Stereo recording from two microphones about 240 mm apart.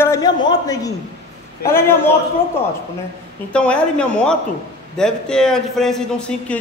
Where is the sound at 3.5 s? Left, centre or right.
Centre.